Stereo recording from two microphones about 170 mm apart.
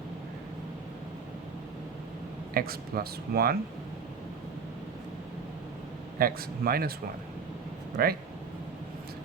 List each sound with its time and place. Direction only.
2.5 s speech: 60° right (ahead or behind)
6.1 s speech: 60° right (ahead or behind)
8.0 s speech: 60° right (ahead or behind)